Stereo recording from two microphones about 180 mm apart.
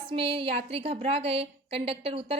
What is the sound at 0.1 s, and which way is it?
A woman's voice, 30° right (ahead or behind).